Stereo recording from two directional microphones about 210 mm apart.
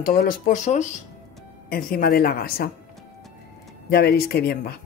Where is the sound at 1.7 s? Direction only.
45° left (ahead or behind).